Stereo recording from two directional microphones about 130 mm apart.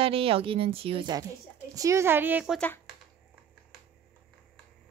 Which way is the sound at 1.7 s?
25° right (ahead or behind).